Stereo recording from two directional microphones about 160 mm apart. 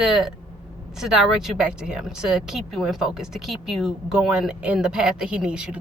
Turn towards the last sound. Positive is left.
turn(degrees=-5)  # may be behind; listen again after turning